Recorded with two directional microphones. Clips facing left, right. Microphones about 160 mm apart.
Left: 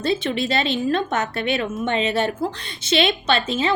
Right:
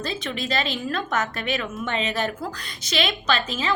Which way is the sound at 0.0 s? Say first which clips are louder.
Left 7 dB; 30° left (ahead or behind).